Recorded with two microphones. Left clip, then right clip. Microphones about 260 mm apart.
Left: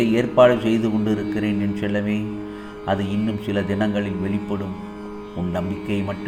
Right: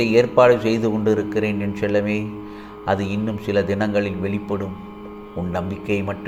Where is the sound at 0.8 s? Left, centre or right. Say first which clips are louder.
Right 3 dB; centre.